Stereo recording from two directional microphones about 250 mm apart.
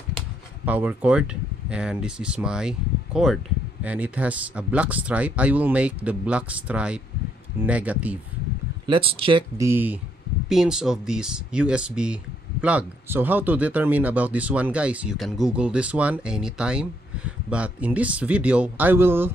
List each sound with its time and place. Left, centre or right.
0.7 s speech: centre
8.8 s speech: right